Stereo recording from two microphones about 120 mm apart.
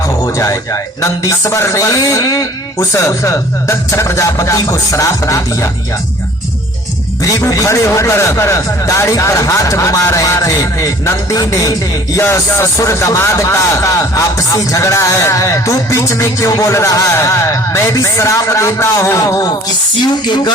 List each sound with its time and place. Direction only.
0.3 s speech: 25° left (ahead or behind)
7.3 s speech: 25° left (ahead or behind)
20.0 s music: 40° left (ahead or behind)